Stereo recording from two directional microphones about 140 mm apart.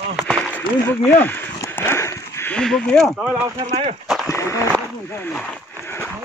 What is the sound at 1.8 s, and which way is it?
Dog, 20° left (ahead or behind).